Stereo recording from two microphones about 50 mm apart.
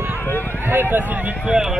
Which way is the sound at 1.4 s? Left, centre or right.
Centre.